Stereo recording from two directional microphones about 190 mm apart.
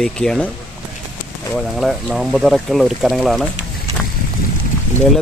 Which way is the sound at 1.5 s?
Centre (ahead or behind).